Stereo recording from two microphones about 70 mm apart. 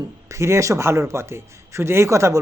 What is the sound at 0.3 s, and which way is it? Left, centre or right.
A man's voice, right.